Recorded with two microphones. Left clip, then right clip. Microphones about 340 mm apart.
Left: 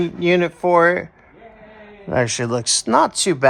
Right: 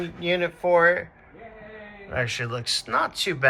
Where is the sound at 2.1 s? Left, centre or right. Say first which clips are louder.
Left 8 dB; centre.